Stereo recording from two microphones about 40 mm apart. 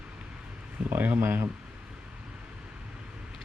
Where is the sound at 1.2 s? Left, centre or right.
Right.